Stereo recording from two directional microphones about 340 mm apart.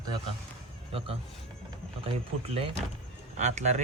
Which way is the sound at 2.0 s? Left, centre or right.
Centre.